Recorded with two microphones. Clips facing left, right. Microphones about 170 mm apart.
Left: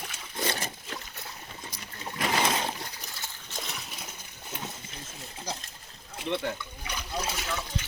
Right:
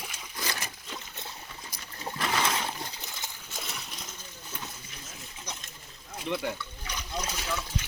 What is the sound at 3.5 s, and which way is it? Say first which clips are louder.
Splash: left 2 dB; centre (ahead or behind).